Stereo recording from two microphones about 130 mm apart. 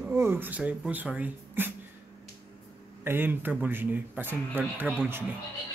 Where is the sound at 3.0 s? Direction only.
15° right (ahead or behind).